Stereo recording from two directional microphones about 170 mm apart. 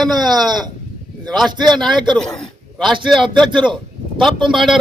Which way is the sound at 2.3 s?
Centre (ahead or behind).